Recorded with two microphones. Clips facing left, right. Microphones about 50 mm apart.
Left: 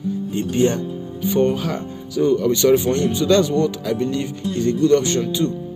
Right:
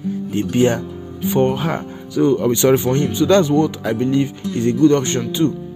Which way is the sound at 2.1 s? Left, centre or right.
Centre.